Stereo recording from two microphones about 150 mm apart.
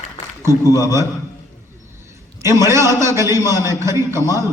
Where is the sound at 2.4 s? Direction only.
20° right (ahead or behind).